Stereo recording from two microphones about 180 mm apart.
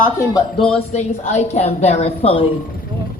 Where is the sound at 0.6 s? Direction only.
30° left (ahead or behind).